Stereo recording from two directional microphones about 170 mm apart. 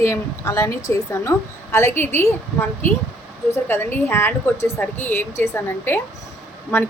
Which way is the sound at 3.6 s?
10° left (ahead or behind).